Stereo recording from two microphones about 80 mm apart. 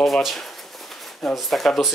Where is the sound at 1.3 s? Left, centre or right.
Centre.